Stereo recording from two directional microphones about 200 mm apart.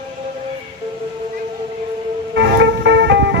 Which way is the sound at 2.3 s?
60° right (ahead or behind).